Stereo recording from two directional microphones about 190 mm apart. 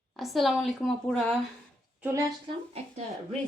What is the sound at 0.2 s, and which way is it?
A woman's voice, centre (ahead or behind).